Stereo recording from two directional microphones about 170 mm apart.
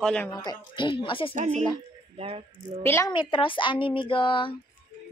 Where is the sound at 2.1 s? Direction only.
35° right (ahead or behind).